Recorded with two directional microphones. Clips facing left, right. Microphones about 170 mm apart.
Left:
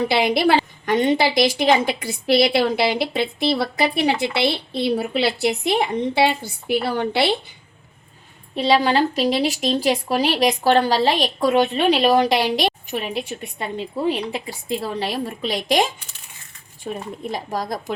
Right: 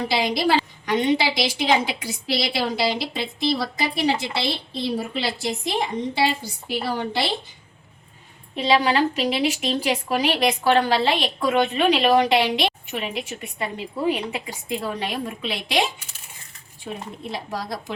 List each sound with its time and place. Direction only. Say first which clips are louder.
0.1 s a woman's voice: left 2 dB; 60° left (ahead or behind)
8.5 s a woman's voice: left 2 dB; 35° left (ahead or behind)
14.3 s a woman's voice: left 3 dB; 35° left (ahead or behind)
17.3 s speech: left 3 dB; 45° left (ahead or behind)